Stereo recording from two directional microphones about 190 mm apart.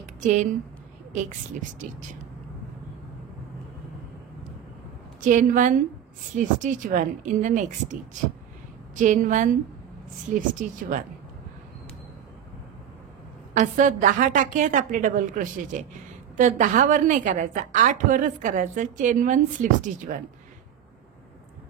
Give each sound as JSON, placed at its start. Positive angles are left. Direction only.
{"t": 0.2, "sound": "speech", "side_deg": -40}
{"t": 5.2, "sound": "a woman's voice", "side_deg": -40}
{"t": 13.6, "sound": "a woman's voice", "side_deg": -40}